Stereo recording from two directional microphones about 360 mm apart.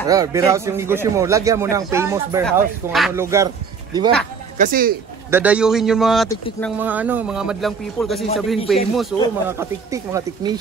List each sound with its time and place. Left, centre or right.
0.1 s a man's voice: centre
4.6 s speech: right
5.3 s a man's voice: centre